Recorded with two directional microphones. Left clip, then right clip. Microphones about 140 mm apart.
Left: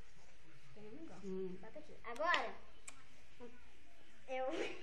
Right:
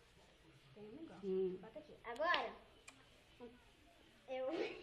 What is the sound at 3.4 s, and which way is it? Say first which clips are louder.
A woman's voice: even; 5° right (ahead or behind).